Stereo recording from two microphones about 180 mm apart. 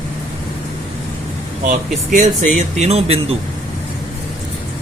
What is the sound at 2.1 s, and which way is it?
Speech, 45° right (ahead or behind).